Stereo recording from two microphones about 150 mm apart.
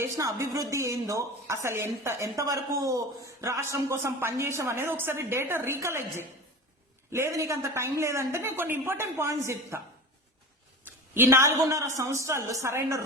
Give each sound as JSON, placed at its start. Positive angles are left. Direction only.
{"t": 0.0, "sound": "a woman's voice", "side_deg": -20}
{"t": 10.8, "sound": "a man's voice", "side_deg": -15}